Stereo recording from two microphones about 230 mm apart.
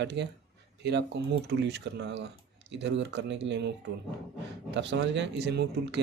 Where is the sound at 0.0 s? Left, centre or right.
Right.